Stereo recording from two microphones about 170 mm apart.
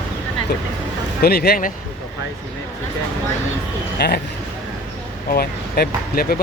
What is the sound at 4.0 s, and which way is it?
Speech, 70° left (ahead or behind).